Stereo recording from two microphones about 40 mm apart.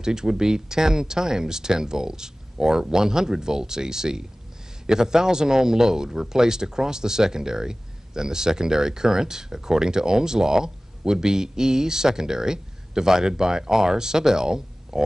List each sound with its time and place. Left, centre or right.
0.0 s a man's voice: centre